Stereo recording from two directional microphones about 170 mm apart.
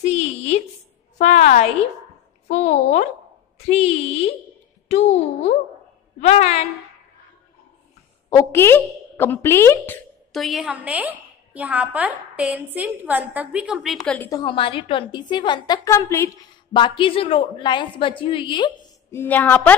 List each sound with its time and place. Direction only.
0.0 s a sound: 40° left (ahead or behind)
1.1 s a woman's voice: 40° left (ahead or behind)
8.3 s a woman's voice: 15° left (ahead or behind)
10.3 s a woman's voice: centre (ahead or behind)
14.1 s a woman's voice: 10° left (ahead or behind)
14.4 s a woman's voice: 30° left (ahead or behind)
16.7 s a woman's voice: 30° left (ahead or behind)
19.0 s a woman's voice: 10° left (ahead or behind)